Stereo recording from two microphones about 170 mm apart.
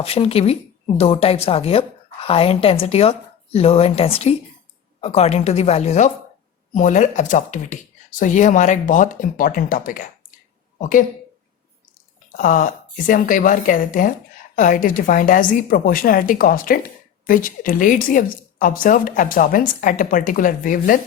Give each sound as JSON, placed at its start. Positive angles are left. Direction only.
{"t": 0.0, "sound": "a woman's voice", "side_deg": 35}
{"t": 12.4, "sound": "a woman's voice", "side_deg": 50}